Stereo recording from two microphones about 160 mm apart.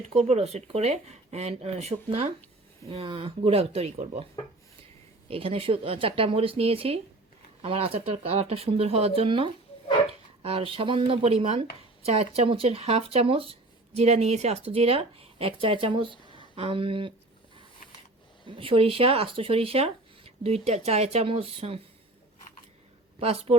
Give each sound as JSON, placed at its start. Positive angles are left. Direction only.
{"t": 0.1, "sound": "speech", "side_deg": -40}
{"t": 5.3, "sound": "speech", "side_deg": -35}
{"t": 18.4, "sound": "speech", "side_deg": -35}
{"t": 23.2, "sound": "speech", "side_deg": -40}